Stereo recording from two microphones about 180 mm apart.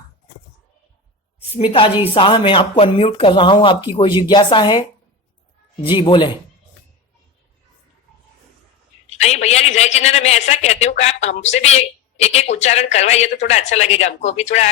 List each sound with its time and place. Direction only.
1.5 s speech: 30° left (ahead or behind)
5.9 s speech: 30° left (ahead or behind)
9.1 s a man's voice: 35° left (ahead or behind)